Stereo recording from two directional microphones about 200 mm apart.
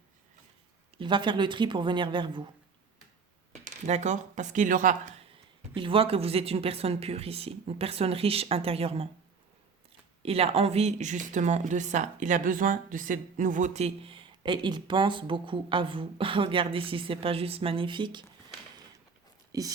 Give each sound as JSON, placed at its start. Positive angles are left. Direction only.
{"t": 0.9, "sound": "speech", "side_deg": -25}
{"t": 3.5, "sound": "speech", "side_deg": -35}
{"t": 5.7, "sound": "speech", "side_deg": -25}
{"t": 10.2, "sound": "speech", "side_deg": -30}
{"t": 19.5, "sound": "speech", "side_deg": -15}